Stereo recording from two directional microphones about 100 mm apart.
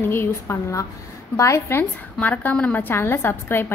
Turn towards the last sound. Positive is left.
turn(degrees=25)  # may be behind; listen again after turning